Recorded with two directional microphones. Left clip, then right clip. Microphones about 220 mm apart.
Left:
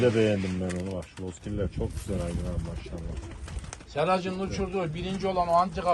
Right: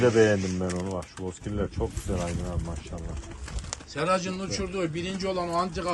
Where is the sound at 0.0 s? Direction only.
15° right (ahead or behind).